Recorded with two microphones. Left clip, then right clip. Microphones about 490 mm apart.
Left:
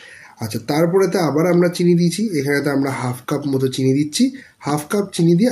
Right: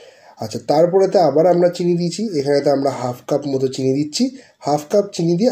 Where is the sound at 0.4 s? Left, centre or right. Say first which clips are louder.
Right 4 dB; left.